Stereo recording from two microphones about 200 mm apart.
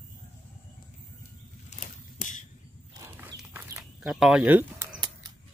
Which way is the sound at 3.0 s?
15° right (ahead or behind).